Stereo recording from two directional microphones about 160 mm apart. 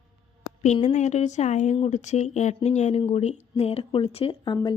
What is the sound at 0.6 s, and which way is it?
Speech, 45° left (ahead or behind).